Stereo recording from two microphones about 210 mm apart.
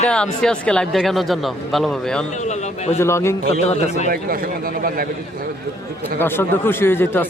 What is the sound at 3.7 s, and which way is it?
Speech, 30° left (ahead or behind).